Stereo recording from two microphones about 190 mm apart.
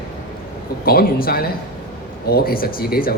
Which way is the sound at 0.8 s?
50° left (ahead or behind).